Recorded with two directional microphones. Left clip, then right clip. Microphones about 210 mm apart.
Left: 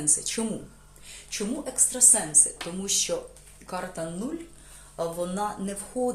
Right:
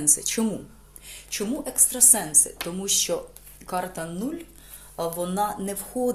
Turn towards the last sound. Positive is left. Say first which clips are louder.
# right 2 dB
turn(degrees=-35)  # may be behind; listen again after turning